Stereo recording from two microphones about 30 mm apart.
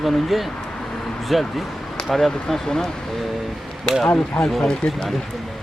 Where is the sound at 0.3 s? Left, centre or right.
Centre.